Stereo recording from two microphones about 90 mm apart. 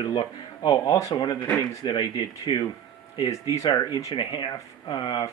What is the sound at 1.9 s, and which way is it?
Speech, 55° left (ahead or behind).